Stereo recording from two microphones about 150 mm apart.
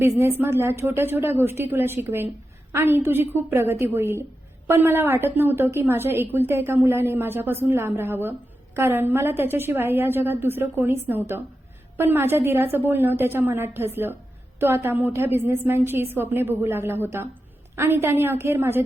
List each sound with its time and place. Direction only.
0.2 s a woman's voice: 15° right (ahead or behind)